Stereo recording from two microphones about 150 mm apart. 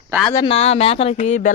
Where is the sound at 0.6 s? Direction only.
45° left (ahead or behind).